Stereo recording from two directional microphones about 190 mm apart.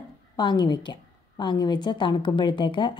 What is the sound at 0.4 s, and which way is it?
A woman's voice, 20° left (ahead or behind).